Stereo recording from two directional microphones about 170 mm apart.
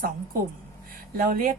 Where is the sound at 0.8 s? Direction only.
55° right (ahead or behind).